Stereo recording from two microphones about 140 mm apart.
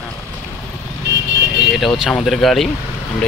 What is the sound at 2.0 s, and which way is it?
Speech, centre (ahead or behind).